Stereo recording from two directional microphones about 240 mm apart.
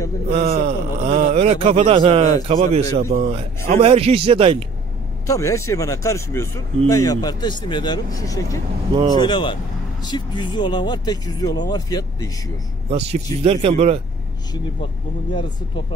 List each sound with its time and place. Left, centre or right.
0.3 s a man's voice: right
5.2 s speech: centre
12.9 s a man's voice: right